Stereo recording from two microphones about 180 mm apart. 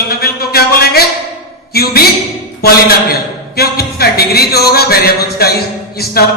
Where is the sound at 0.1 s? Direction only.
60° left (ahead or behind).